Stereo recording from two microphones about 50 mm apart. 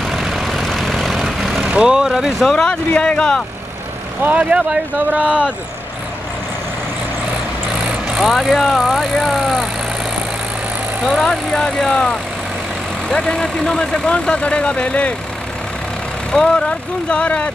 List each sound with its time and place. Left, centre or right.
0.0 s vehicle: centre
1.7 s speech: centre
2.5 s speech: centre
4.2 s speech: right
8.1 s vehicle: centre
8.4 s speech: centre
9.0 s speech: centre
9.3 s speech: centre
11.2 s speech: centre
16.3 s speech: centre